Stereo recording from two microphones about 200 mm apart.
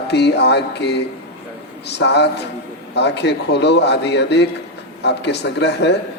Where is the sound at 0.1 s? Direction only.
55° left (ahead or behind).